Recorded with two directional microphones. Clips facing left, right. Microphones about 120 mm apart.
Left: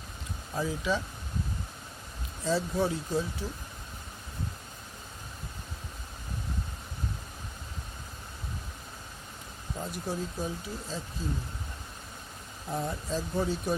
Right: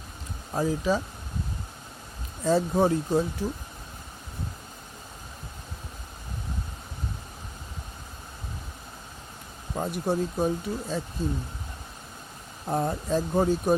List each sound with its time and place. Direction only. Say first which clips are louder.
0.5 s speech: right 5 dB; 40° right (ahead or behind)
2.4 s speech: right 6 dB; 50° right (ahead or behind)
9.7 s speech: right 8 dB; 60° right (ahead or behind)
12.6 s speech: right 6 dB; 50° right (ahead or behind)